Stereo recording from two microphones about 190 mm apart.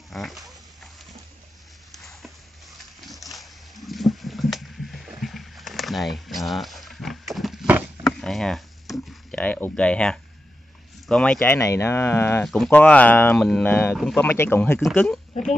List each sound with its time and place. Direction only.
0.1 s pig: centre (ahead or behind)
1.9 s a sound: centre (ahead or behind)
3.1 s rowboat: centre (ahead or behind)
8.0 s a sound: centre (ahead or behind)
11.1 s speech: 5° left (ahead or behind)
14.8 s speech: centre (ahead or behind)